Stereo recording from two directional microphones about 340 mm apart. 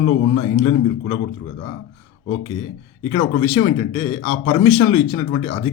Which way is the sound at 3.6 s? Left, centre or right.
Centre.